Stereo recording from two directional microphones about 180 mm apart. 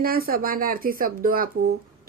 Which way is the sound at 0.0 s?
55° right (ahead or behind).